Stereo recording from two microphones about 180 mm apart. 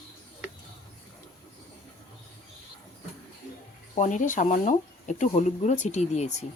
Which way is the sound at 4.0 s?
45° left (ahead or behind).